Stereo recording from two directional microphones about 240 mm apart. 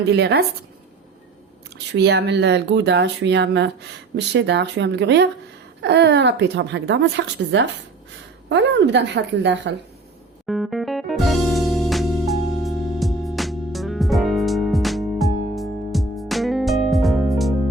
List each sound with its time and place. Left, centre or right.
0.2 s a woman's voice: right
1.9 s a woman's voice: right
10.4 s music: centre